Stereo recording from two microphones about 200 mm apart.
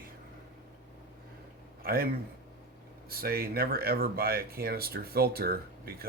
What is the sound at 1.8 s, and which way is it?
Speech, 50° right (ahead or behind).